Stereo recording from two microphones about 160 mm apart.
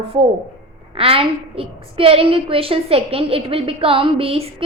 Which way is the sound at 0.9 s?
35° right (ahead or behind).